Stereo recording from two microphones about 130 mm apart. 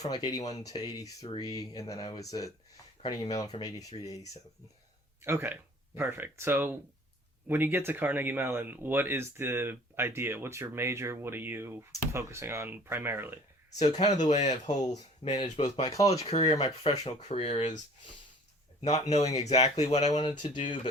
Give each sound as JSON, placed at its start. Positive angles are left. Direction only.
{"t": 0.0, "sound": "speech", "side_deg": 30}
{"t": 5.2, "sound": "speech", "side_deg": -15}
{"t": 13.9, "sound": "speech", "side_deg": 60}
{"t": 15.2, "sound": "speech", "side_deg": 45}
{"t": 15.9, "sound": "speech", "side_deg": 25}
{"t": 16.3, "sound": "speech", "side_deg": 55}
{"t": 16.6, "sound": "speech", "side_deg": 30}
{"t": 17.2, "sound": "speech", "side_deg": 60}
{"t": 18.8, "sound": "speech", "side_deg": 55}
{"t": 20.1, "sound": "speech", "side_deg": 35}